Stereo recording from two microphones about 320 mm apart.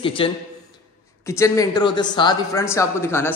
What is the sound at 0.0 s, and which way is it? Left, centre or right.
A man's voice, centre.